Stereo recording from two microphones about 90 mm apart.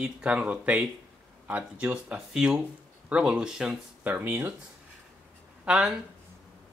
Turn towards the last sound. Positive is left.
turn(degrees=-5)  # may be behind; listen again after turning